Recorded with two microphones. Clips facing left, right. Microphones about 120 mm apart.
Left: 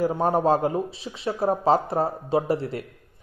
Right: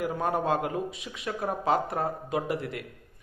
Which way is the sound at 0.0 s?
30° left (ahead or behind).